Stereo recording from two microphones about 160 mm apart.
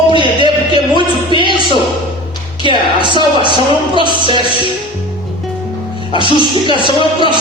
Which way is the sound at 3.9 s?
30° right (ahead or behind).